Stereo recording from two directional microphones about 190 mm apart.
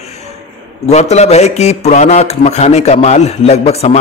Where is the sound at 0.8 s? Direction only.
35° left (ahead or behind).